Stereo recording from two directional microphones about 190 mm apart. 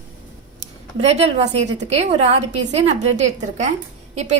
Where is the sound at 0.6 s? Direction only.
35° right (ahead or behind).